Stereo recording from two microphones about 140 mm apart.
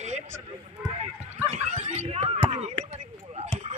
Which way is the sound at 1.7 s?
55° right (ahead or behind).